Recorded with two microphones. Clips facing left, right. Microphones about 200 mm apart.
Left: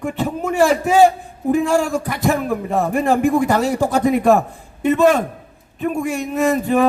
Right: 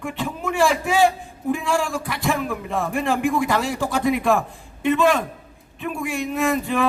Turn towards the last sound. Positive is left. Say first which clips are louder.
# left 5 dB
turn(degrees=40)  # may be behind; listen again after turning